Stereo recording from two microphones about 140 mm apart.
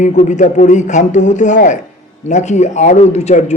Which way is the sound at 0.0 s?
60° left (ahead or behind).